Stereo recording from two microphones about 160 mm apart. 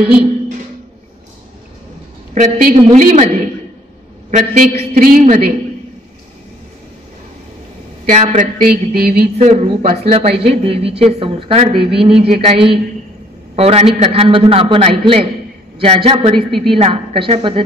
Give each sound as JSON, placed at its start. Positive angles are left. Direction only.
{"t": 2.3, "sound": "a woman's voice", "side_deg": -50}
{"t": 4.3, "sound": "a man's voice", "side_deg": -50}
{"t": 8.1, "sound": "a woman's voice", "side_deg": -45}
{"t": 8.5, "sound": "speech", "side_deg": -70}
{"t": 9.4, "sound": "speech", "side_deg": -40}
{"t": 16.3, "sound": "a woman's voice", "side_deg": 0}
{"t": 16.7, "sound": "speech", "side_deg": -35}